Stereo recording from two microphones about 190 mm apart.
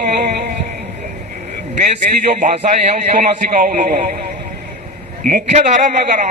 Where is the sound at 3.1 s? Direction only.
40° right (ahead or behind).